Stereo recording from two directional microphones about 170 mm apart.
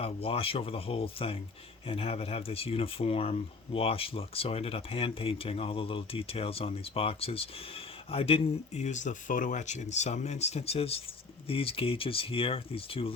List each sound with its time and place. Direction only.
0.0 s speech: 35° left (ahead or behind)